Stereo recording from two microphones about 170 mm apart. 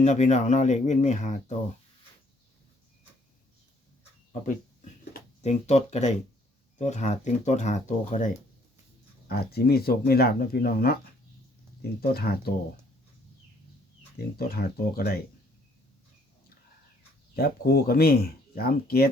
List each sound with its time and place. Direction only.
0.0 s speech: 45° left (ahead or behind)
5.4 s speech: 40° left (ahead or behind)
9.3 s speech: 65° left (ahead or behind)
14.2 s speech: 65° left (ahead or behind)
17.3 s speech: 65° left (ahead or behind)